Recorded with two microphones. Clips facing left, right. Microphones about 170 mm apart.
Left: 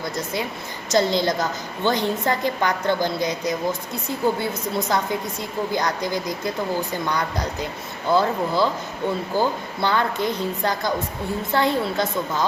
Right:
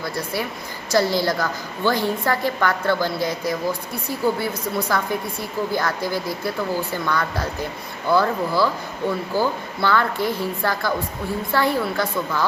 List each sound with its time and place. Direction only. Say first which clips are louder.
0.0 s a woman's voice: even; 20° left (ahead or behind)